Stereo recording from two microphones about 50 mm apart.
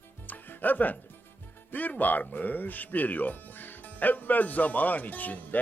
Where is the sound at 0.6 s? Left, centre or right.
Left.